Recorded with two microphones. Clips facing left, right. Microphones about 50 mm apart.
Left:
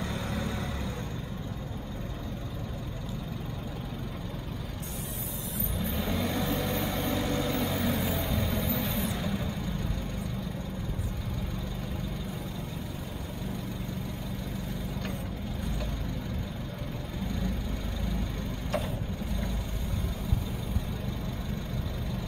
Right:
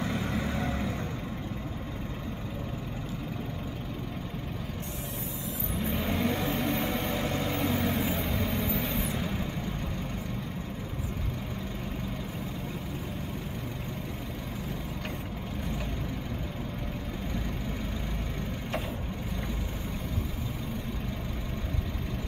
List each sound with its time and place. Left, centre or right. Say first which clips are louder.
0.0 s vehicle: right 2 dB; centre
5.8 s vehicle: right 2 dB; centre